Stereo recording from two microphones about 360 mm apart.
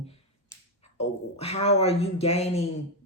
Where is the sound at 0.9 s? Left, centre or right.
Centre.